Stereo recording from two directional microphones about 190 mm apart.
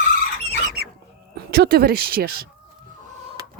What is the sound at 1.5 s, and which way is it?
Speech, 55° right (ahead or behind).